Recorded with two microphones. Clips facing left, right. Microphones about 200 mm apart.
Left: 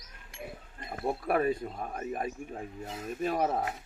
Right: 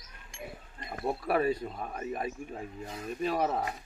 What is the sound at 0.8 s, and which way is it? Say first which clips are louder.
Speech: left 1 dB; 50° left (ahead or behind).